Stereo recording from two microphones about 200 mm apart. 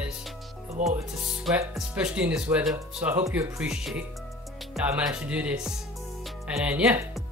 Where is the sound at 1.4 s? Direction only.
5° right (ahead or behind).